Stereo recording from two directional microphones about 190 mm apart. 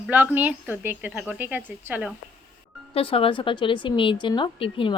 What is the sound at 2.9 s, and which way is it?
A woman's voice, 30° left (ahead or behind).